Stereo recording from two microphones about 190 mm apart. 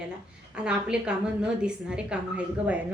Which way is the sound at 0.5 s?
5° right (ahead or behind).